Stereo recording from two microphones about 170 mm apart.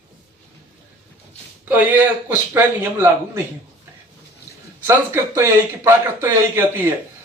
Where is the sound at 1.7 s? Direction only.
10° right (ahead or behind).